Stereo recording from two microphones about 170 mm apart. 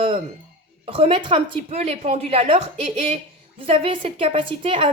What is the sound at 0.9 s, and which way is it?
A woman's voice, 35° right (ahead or behind).